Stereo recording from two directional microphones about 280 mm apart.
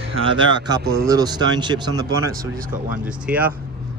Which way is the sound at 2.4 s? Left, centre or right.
Right.